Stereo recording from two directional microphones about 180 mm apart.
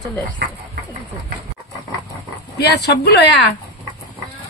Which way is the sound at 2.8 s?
65° left (ahead or behind).